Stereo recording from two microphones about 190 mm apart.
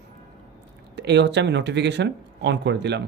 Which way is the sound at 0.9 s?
65° right (ahead or behind).